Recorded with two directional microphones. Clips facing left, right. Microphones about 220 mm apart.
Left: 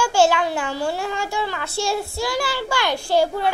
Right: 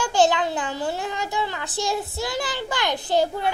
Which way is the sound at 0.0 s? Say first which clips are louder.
Left 2 dB; 20° right (ahead or behind).